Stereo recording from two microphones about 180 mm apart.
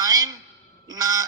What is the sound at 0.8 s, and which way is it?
Goose, 20° right (ahead or behind).